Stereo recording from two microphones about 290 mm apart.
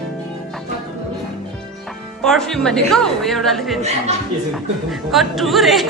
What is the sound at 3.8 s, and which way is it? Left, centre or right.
Speech, right.